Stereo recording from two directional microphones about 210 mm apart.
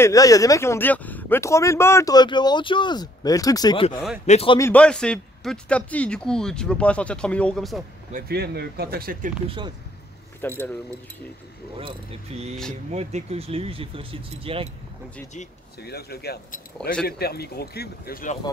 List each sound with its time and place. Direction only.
0.0 s a man's voice: 15° left (ahead or behind)
4.6 s speech: 10° left (ahead or behind)
8.1 s speech: 50° right (ahead or behind)
10.4 s speech: 10° left (ahead or behind)
11.8 s speech: 30° right (ahead or behind)
15.8 s speech: 50° left (ahead or behind)